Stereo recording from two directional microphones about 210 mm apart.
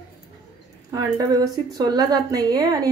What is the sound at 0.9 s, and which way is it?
A woman's voice, 20° right (ahead or behind).